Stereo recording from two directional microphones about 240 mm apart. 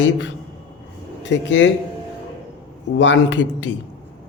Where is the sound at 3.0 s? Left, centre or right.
Left.